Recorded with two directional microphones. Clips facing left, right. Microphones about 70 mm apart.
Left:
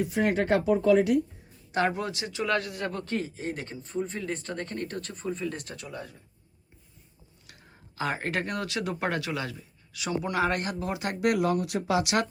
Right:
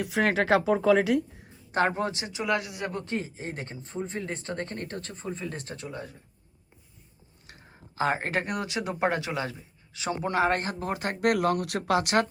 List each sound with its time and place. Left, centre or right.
0.0 s speech: right
1.7 s a man's voice: right
7.4 s speech: right